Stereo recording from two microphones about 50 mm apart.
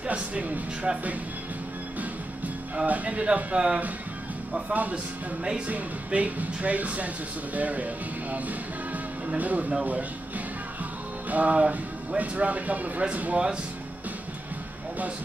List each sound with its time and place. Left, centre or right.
0.0 s music: right
0.9 s speech: centre
2.0 s music: right
2.9 s speech: right
4.7 s speech: right
9.8 s music: right
13.0 s speech: right